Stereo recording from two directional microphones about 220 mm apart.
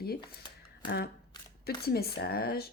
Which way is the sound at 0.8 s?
45° left (ahead or behind).